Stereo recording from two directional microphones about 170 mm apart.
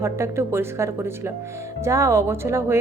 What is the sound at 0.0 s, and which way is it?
A woman's voice, 15° right (ahead or behind).